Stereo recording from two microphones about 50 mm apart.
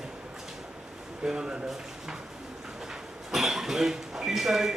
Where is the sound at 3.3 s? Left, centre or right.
Centre.